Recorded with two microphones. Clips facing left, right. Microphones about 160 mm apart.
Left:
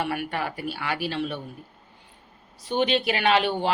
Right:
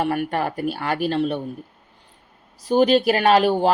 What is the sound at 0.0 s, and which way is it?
A woman's voice, 40° right (ahead or behind).